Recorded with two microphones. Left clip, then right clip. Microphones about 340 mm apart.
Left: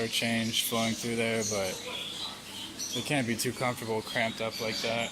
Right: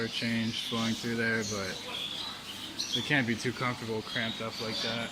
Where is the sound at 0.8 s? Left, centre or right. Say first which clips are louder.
Left 2 dB; centre.